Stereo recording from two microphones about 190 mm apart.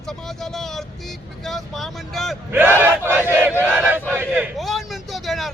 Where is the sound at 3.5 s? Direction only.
10° right (ahead or behind).